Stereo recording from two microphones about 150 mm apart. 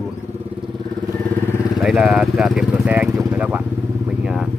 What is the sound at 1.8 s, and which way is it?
Speech, centre (ahead or behind).